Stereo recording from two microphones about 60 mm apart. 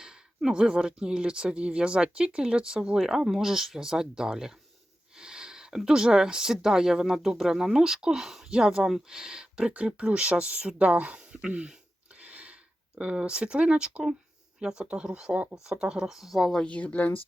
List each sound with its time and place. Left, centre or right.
0.0 s speech: centre
3.0 s speech: centre
12.2 s a sound: right
13.0 s speech: centre
16.6 s speech: left